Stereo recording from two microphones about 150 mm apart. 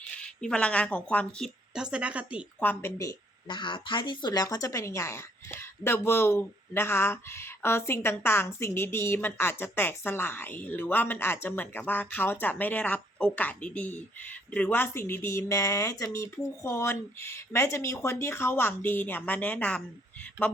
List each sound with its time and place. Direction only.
0.2 s speech: 5° left (ahead or behind)
1.7 s a woman's voice: 5° right (ahead or behind)
2.6 s speech: 15° left (ahead or behind)